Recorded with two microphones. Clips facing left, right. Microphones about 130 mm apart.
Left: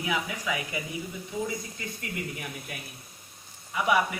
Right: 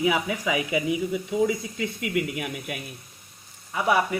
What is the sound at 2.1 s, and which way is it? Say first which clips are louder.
Speech: right 8 dB; 85° right.